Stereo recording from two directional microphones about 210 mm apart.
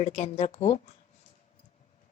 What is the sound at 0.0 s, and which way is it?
Speech, 30° left (ahead or behind).